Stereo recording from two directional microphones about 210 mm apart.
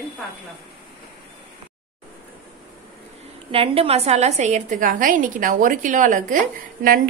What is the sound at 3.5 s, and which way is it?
A woman's voice, 25° right (ahead or behind).